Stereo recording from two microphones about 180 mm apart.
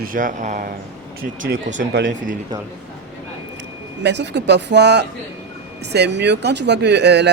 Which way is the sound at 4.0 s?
70° right (ahead or behind).